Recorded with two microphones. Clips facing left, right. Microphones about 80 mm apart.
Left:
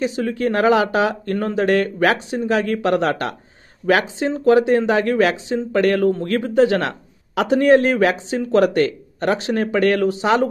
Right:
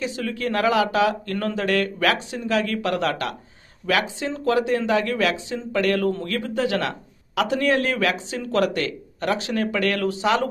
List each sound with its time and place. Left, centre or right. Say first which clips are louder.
0.0 s a man's voice: left 6 dB; left